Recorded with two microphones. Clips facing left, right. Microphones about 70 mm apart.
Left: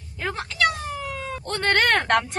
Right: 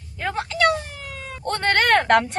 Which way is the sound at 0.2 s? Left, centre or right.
Centre.